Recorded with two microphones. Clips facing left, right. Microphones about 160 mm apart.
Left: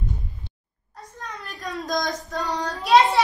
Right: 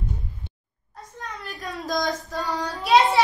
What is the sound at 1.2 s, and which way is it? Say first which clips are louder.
A child's voice: even; centre (ahead or behind).